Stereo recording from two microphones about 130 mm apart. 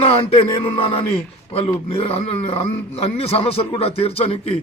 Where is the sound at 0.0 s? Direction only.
45° left (ahead or behind).